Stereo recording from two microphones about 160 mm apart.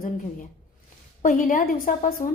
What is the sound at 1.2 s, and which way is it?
A woman's voice, 55° left (ahead or behind).